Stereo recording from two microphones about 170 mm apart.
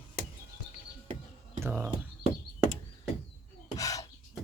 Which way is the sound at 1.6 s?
15° right (ahead or behind).